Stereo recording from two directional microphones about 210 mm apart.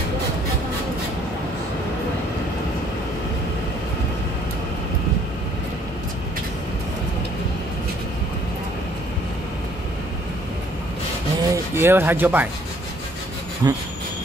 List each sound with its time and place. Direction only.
11.4 s speech: 15° right (ahead or behind)
13.6 s speech: 15° right (ahead or behind)